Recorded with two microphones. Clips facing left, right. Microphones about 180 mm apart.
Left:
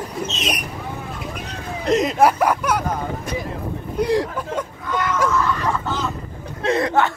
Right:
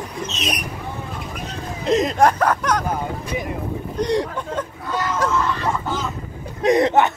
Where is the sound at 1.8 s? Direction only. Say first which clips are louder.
Even; centre (ahead or behind).